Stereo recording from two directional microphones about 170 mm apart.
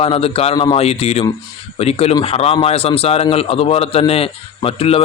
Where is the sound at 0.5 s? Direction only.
25° left (ahead or behind).